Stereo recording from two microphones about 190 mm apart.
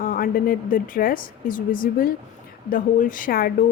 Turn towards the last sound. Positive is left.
turn(degrees=50)  # may be behind; listen again after turning